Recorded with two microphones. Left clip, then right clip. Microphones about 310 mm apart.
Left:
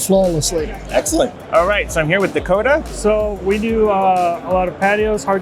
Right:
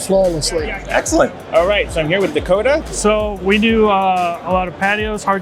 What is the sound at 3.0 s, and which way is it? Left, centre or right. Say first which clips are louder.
Speech: even; right.